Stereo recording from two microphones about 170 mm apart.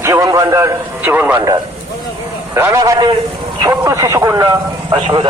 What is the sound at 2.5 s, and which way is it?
Speech, 15° right (ahead or behind).